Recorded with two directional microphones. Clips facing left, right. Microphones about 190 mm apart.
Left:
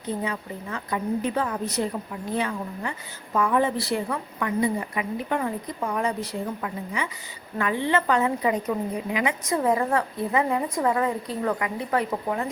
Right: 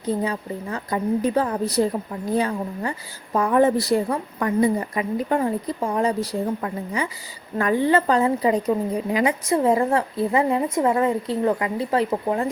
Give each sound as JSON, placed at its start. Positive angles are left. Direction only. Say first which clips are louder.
{"t": 0.2, "sound": "a woman's voice", "louder": "right 5 dB", "side_deg": -35}